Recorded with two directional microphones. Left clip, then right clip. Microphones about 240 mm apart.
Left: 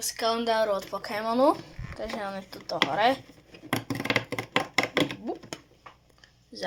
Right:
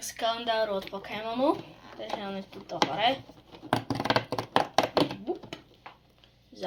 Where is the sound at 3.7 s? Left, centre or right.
Left.